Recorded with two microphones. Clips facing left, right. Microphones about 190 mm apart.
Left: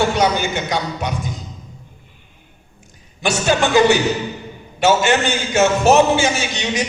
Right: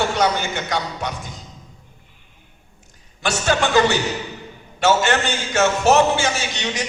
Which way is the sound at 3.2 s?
15° left (ahead or behind).